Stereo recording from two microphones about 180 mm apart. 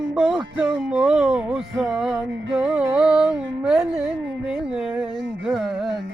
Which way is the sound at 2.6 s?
5° right (ahead or behind).